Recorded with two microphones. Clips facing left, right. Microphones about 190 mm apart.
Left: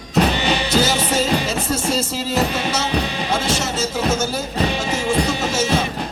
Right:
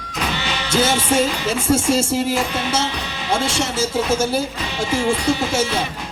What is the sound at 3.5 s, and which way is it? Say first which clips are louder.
Speech: right 2 dB; 30° right (ahead or behind).